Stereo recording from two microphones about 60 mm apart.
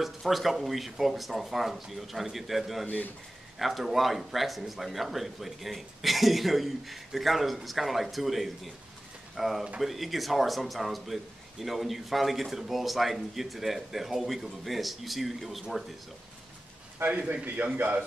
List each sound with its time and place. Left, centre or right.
0.0 s speech: centre
17.0 s a man's voice: right